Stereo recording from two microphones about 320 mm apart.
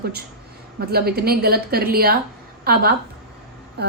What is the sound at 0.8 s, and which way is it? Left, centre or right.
A woman's voice, right.